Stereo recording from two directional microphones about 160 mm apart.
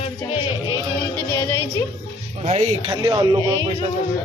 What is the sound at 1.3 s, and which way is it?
Speech, 15° left (ahead or behind).